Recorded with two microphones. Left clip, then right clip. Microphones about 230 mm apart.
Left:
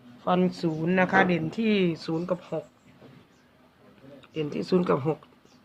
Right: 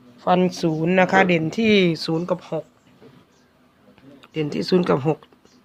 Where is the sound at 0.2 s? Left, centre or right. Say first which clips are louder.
Right 7 dB; right.